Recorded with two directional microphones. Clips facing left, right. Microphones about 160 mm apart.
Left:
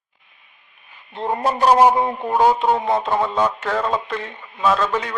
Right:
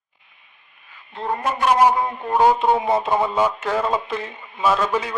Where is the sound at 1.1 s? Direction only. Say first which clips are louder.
Left 3 dB; 30° left (ahead or behind).